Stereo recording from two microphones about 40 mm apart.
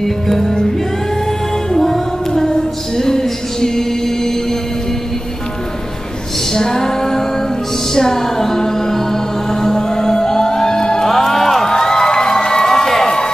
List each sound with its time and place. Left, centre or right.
0.0 s music: centre
1.7 s female singing: centre
6.5 s female singing: centre
7.9 s music: centre
11.7 s crowd: centre